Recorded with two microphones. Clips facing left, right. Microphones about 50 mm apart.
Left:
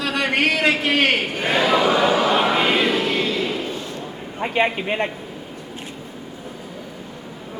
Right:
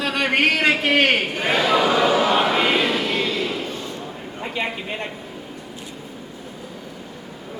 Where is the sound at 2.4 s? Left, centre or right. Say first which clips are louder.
Even; centre.